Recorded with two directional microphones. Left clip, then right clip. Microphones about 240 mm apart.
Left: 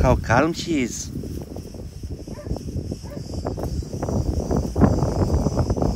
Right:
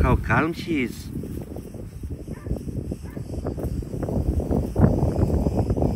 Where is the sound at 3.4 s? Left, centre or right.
Centre.